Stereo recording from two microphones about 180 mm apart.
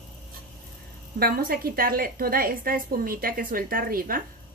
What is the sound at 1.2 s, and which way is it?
A woman's voice, 55° right (ahead or behind).